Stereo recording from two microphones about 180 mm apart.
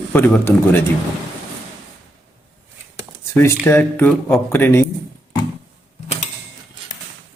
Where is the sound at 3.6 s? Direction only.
10° left (ahead or behind).